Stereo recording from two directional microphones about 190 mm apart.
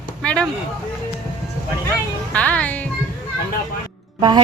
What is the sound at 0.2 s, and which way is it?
Vehicle, 5° left (ahead or behind).